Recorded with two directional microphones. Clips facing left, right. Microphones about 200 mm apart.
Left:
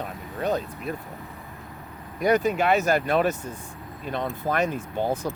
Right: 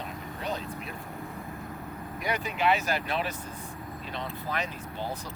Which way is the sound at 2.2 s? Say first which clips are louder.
Left 8 dB; 45° left (ahead or behind).